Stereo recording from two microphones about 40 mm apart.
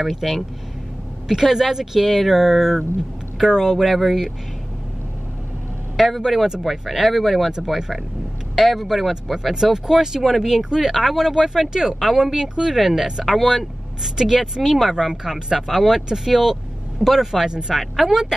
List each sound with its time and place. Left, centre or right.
0.0 s speech: centre
3.7 s speech: centre
5.9 s speech: centre
17.5 s speech: centre